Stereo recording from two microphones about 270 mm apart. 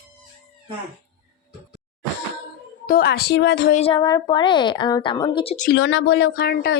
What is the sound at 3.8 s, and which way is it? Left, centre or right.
A woman's voice, centre.